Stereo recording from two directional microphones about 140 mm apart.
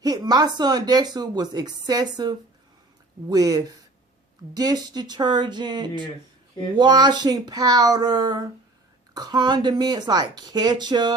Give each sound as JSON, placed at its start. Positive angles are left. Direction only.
{"t": 0.0, "sound": "a woman's voice", "side_deg": -30}